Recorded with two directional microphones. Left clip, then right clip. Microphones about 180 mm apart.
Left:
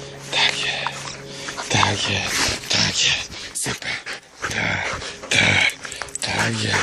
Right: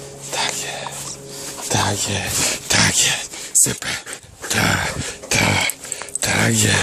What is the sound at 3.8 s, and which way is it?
Speech, 45° right (ahead or behind).